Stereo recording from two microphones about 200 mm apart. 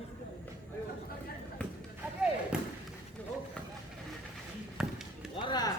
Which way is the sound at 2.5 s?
5° right (ahead or behind).